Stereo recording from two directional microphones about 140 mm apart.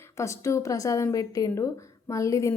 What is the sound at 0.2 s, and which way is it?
Speech, 20° left (ahead or behind).